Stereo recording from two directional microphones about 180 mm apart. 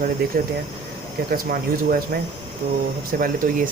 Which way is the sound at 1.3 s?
50° right (ahead or behind).